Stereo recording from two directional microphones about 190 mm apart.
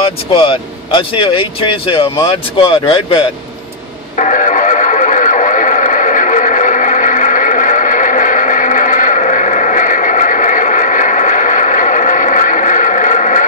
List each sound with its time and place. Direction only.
0.3 s speech: 30° left (ahead or behind)
4.2 s radio: 40° left (ahead or behind)